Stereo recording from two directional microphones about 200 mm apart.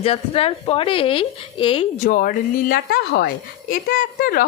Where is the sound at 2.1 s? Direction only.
45° left (ahead or behind).